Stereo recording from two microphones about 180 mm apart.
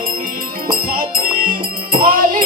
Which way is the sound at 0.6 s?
55° right (ahead or behind).